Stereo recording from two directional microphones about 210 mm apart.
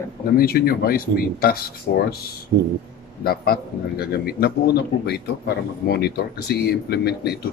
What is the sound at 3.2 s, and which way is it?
Speech, 45° left (ahead or behind).